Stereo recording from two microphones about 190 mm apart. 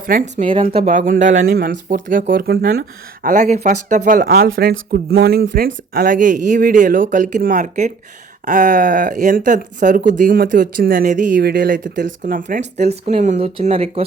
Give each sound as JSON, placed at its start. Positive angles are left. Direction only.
{"t": 0.0, "sound": "speech", "side_deg": -45}
{"t": 0.4, "sound": "speech", "side_deg": -30}
{"t": 3.2, "sound": "speech", "side_deg": -40}
{"t": 12.5, "sound": "speech", "side_deg": -35}